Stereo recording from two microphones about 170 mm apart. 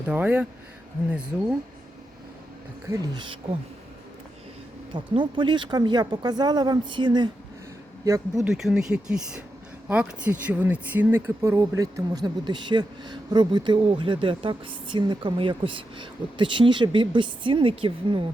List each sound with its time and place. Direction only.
0.0 s speech: 10° right (ahead or behind)
2.9 s speech: 20° right (ahead or behind)
4.9 s speech: 30° right (ahead or behind)
8.4 s speech: centre (ahead or behind); by 18.3 s 30° right (ahead or behind)